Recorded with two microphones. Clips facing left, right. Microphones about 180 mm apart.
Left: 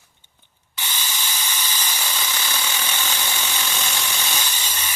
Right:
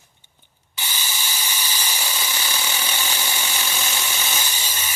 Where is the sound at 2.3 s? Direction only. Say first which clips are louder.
Even; 10° right (ahead or behind).